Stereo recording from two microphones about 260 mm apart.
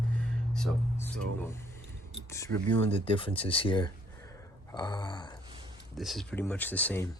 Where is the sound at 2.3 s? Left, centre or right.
Centre.